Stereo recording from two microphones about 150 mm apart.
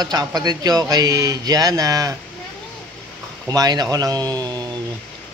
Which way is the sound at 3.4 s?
25° right (ahead or behind).